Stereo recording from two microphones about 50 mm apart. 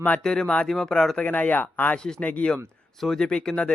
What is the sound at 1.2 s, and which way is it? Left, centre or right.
Speech, left.